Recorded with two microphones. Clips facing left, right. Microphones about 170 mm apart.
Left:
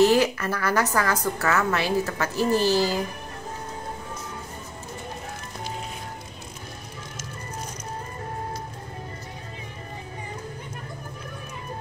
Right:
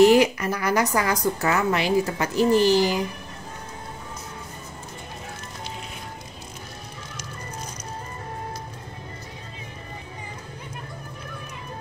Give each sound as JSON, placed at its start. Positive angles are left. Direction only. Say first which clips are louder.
{"t": 0.0, "sound": "a woman's voice", "louder": "right 3 dB", "side_deg": -15}